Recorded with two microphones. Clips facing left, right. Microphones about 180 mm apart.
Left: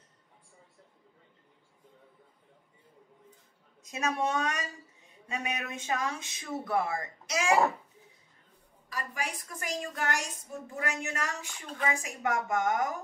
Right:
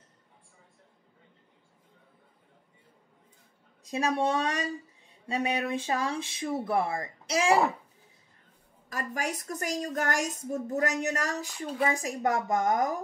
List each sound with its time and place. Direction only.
3.8 s speech: 30° right (ahead or behind)
8.8 s a woman's voice: 45° right (ahead or behind)